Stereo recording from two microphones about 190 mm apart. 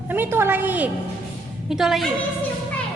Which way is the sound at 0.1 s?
10° right (ahead or behind).